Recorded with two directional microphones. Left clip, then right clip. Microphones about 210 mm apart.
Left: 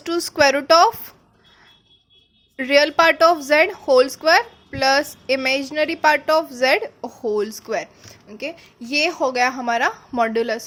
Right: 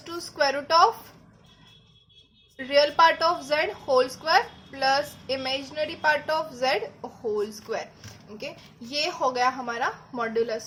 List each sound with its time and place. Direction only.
0.0 s a woman's voice: 45° left (ahead or behind)
2.6 s a woman's voice: 45° left (ahead or behind)